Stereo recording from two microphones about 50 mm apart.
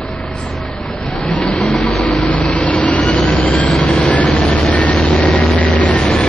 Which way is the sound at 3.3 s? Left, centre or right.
Left.